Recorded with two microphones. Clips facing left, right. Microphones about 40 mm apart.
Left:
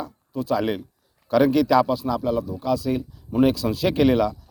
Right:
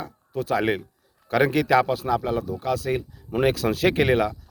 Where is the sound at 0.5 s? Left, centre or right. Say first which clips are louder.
Even; right.